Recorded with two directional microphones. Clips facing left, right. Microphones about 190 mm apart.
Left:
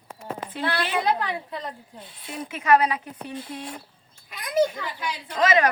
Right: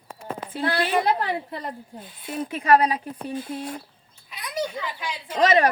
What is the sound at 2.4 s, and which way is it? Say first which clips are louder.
Speech: right 1 dB; 35° right (ahead or behind).